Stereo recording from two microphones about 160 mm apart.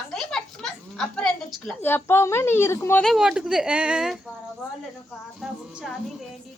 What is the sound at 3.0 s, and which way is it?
Speech, centre (ahead or behind).